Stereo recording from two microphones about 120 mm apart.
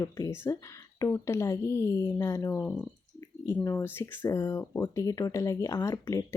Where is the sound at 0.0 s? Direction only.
25° left (ahead or behind).